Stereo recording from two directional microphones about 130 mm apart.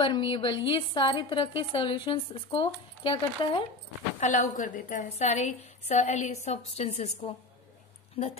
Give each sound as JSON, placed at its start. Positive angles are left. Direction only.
{"t": 0.0, "sound": "a woman's voice", "side_deg": 40}
{"t": 4.2, "sound": "a woman's voice", "side_deg": 65}
{"t": 5.2, "sound": "a woman's voice", "side_deg": 60}